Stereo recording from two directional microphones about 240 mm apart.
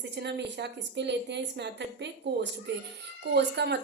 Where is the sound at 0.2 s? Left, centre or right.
Right.